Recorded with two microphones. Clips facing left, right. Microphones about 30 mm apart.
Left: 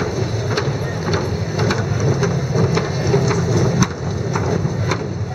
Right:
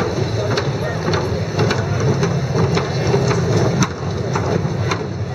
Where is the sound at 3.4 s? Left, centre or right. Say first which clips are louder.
Right 1 dB; right.